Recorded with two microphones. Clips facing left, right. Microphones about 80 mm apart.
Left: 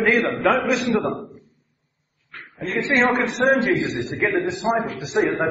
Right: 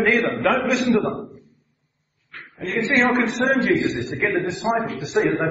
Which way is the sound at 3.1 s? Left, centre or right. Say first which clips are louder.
Left 1 dB; centre.